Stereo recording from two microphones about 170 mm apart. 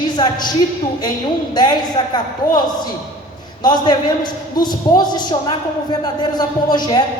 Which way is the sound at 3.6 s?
25° left (ahead or behind).